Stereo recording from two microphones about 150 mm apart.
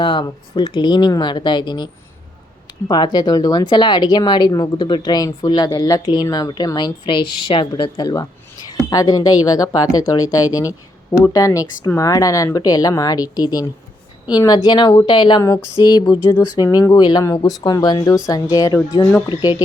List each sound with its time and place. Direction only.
0.0 s speech: 30° left (ahead or behind)